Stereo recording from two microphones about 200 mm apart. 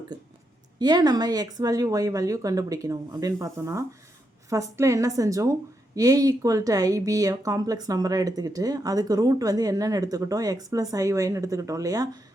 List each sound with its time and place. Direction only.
0.8 s a woman's voice: 20° right (ahead or behind)